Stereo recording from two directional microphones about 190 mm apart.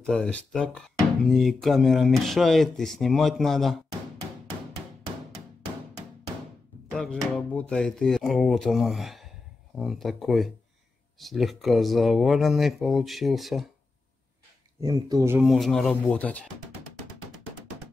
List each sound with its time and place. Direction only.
0.0 s speech: 5° left (ahead or behind)
6.9 s speech: 5° left (ahead or behind)
14.8 s speech: 15° right (ahead or behind)
15.4 s speech: centre (ahead or behind)